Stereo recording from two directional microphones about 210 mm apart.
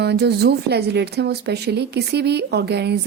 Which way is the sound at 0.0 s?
50° right (ahead or behind).